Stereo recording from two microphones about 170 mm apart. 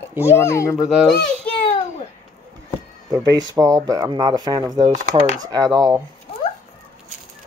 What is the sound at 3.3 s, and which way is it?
Speech, 20° right (ahead or behind).